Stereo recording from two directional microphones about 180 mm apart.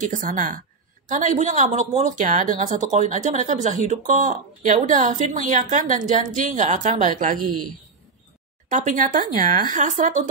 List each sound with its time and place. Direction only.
0.1 s a woman's voice: 45° right (ahead or behind)
8.6 s a woman's voice: 45° right (ahead or behind)